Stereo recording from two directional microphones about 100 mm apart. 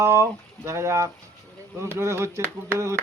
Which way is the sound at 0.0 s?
25° right (ahead or behind).